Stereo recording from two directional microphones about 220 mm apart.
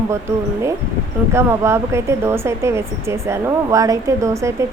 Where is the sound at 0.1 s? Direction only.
15° right (ahead or behind).